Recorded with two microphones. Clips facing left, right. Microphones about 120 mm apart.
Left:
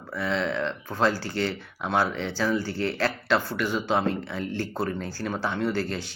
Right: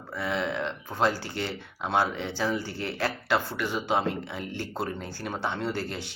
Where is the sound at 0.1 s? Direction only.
20° right (ahead or behind).